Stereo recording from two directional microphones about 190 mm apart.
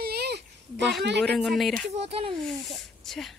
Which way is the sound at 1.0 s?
65° right (ahead or behind).